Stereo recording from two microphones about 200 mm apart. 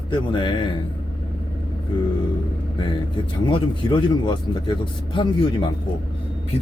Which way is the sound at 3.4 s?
25° left (ahead or behind).